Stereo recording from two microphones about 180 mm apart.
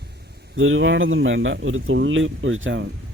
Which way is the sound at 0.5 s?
90° right.